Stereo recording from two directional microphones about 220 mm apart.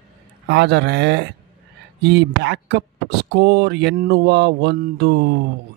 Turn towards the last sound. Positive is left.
turn(degrees=-50)  # may be behind; listen again after turning